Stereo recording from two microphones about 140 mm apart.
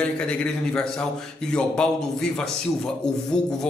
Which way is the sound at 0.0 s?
5° left (ahead or behind).